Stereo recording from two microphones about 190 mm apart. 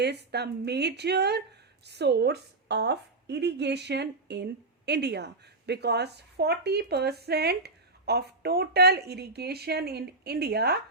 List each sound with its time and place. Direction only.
0.0 s a woman's voice: 60° right (ahead or behind)